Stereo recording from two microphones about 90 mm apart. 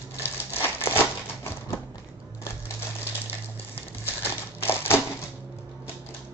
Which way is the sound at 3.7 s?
25° left (ahead or behind).